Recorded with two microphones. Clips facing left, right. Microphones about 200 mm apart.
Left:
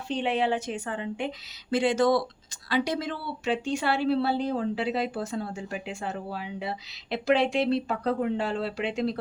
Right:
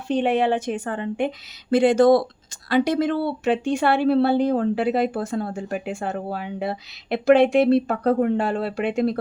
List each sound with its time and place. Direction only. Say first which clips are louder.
0.1 s a woman's voice: right 6 dB; 50° right (ahead or behind)